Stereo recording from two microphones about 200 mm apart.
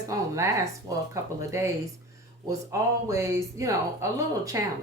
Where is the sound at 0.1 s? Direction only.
15° right (ahead or behind).